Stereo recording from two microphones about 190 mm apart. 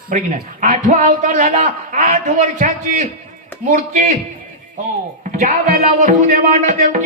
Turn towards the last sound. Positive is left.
turn(degrees=-45)  # may be behind; listen again after turning